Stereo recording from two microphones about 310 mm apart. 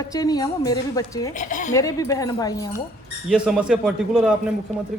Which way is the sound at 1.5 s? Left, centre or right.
Left.